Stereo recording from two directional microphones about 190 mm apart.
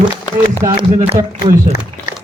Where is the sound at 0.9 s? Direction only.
35° right (ahead or behind).